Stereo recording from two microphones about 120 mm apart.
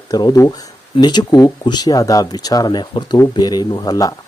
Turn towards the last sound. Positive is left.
turn(degrees=30)  # may be behind; listen again after turning